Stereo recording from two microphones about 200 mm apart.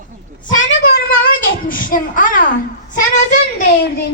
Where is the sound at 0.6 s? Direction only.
60° left (ahead or behind).